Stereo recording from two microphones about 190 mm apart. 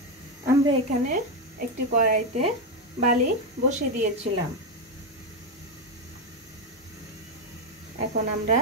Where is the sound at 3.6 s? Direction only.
40° right (ahead or behind).